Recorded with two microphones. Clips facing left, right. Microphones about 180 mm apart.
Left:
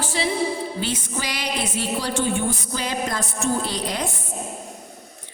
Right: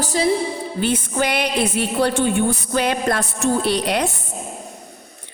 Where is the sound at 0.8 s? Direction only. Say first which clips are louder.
Right 7 dB; 55° right (ahead or behind).